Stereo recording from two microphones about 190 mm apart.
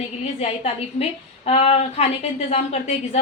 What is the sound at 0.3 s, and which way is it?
A woman's voice, 30° left (ahead or behind).